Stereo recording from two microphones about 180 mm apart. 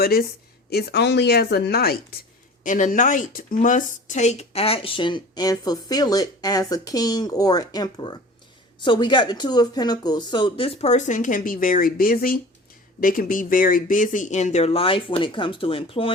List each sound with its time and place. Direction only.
0.0 s a woman's voice: 55° left (ahead or behind)
2.6 s speech: 45° left (ahead or behind)